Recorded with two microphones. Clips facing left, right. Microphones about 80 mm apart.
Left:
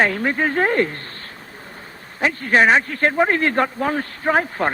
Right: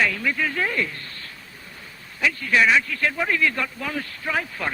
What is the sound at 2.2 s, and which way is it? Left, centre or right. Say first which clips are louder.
Speech: left 4 dB; left.